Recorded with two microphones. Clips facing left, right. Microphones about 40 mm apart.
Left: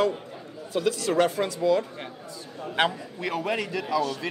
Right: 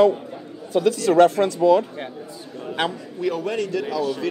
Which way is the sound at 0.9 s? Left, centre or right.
Centre.